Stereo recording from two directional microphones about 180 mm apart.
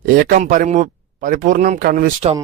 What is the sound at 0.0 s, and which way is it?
Speech, 50° right (ahead or behind).